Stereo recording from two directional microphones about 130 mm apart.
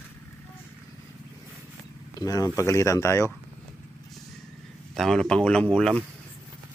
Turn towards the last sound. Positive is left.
turn(degrees=5)  # may be behind; listen again after turning